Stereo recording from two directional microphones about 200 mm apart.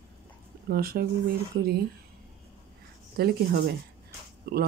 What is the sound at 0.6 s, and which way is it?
Speech, 50° right (ahead or behind).